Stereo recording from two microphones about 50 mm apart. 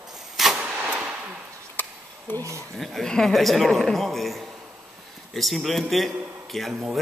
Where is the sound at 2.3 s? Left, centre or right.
Left.